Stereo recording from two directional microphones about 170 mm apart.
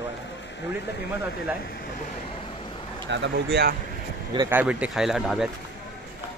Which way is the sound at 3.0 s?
90° right.